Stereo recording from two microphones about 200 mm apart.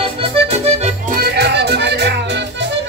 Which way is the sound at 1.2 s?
55° right (ahead or behind).